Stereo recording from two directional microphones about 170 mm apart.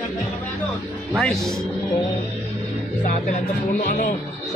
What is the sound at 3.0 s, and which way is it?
Music, 50° left (ahead or behind).